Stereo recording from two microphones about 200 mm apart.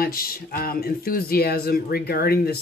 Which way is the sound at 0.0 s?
45° left (ahead or behind).